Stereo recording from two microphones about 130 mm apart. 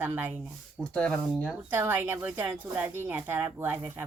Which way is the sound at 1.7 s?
15° right (ahead or behind).